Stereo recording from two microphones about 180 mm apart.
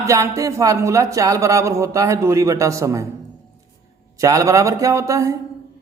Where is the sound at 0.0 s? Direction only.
15° right (ahead or behind).